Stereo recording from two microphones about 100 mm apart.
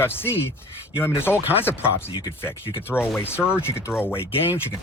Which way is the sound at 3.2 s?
25° left (ahead or behind).